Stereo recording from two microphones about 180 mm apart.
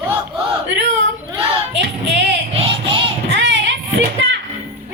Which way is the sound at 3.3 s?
85° right.